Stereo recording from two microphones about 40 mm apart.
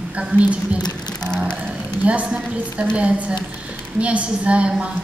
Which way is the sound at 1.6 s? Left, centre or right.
Right.